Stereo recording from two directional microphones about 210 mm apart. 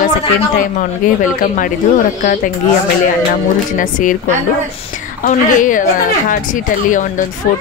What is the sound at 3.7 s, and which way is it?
Speech, 40° left (ahead or behind).